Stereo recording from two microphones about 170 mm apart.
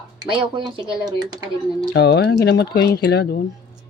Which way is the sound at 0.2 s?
25° right (ahead or behind).